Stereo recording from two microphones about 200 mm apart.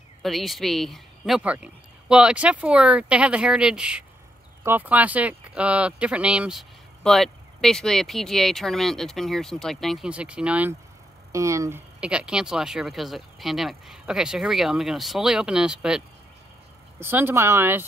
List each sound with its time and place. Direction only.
0.2 s speech: centre (ahead or behind)
17.0 s speech: 10° right (ahead or behind)